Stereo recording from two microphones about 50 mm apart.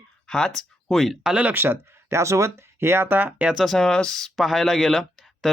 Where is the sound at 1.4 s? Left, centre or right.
Right.